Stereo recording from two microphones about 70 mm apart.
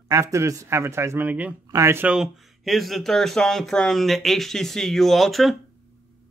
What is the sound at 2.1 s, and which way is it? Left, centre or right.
Speech, centre.